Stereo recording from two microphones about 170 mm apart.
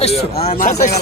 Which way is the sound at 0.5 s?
50° left (ahead or behind).